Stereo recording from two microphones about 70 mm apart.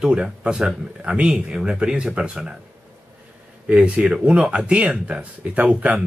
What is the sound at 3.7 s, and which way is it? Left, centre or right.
Speech, centre.